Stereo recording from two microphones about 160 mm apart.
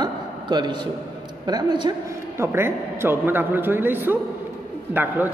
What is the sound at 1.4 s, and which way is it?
Speech, 25° right (ahead or behind).